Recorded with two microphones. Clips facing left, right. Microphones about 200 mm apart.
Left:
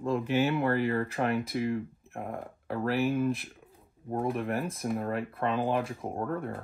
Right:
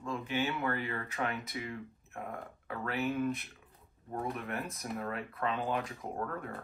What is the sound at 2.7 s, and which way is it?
Speech, 35° left (ahead or behind).